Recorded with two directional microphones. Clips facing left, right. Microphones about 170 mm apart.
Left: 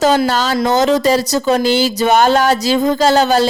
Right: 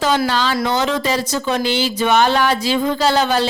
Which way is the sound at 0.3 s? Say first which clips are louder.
Left 4 dB; 45° left (ahead or behind).